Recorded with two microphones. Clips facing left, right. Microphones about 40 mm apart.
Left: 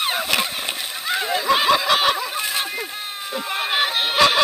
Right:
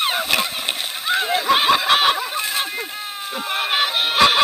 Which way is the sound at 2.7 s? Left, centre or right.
Right.